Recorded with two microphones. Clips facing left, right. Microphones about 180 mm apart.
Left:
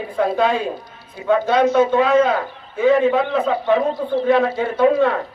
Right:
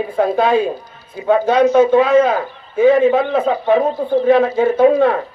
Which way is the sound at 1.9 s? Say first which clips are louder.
Right 3 dB; 50° right (ahead or behind).